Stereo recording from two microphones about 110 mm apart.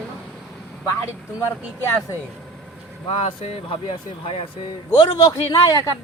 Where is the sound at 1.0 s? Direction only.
25° left (ahead or behind).